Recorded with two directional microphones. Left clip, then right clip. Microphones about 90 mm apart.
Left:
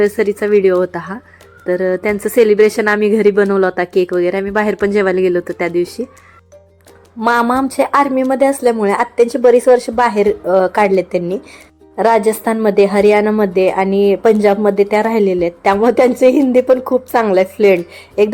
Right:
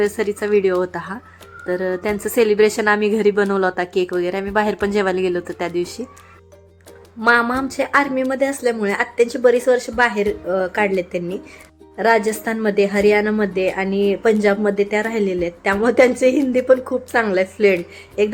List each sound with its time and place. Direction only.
0.0 s a woman's voice: 30° left (ahead or behind)
7.7 s a woman's voice: 45° left (ahead or behind)